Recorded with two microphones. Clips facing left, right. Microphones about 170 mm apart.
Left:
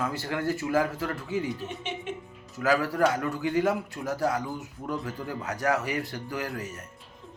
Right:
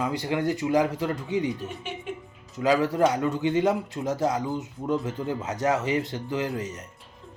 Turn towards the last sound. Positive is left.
turn(degrees=-20)  # may be behind; listen again after turning